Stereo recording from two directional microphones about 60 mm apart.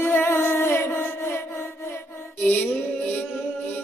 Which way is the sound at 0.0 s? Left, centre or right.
Left.